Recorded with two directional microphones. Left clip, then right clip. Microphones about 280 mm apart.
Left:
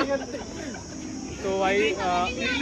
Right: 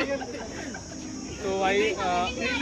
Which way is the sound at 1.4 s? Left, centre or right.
Centre.